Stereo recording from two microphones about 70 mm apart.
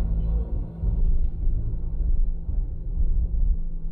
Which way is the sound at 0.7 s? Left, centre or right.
Centre.